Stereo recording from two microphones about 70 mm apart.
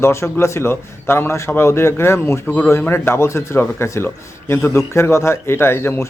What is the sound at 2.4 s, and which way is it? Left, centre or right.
Speech, left.